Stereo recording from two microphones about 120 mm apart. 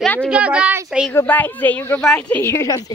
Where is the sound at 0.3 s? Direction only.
10° right (ahead or behind).